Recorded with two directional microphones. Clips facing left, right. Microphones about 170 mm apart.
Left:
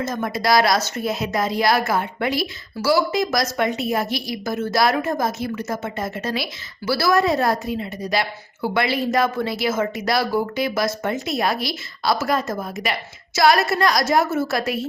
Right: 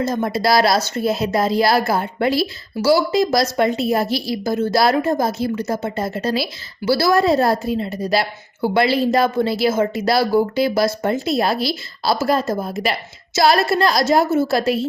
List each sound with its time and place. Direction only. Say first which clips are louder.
0.0 s a woman's voice: right 4 dB; 30° right (ahead or behind)